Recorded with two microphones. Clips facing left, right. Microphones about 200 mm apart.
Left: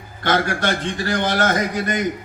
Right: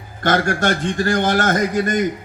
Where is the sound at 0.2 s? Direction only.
45° right (ahead or behind).